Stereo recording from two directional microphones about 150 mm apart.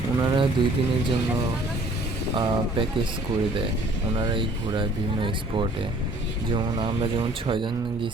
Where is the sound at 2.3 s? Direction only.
35° right (ahead or behind).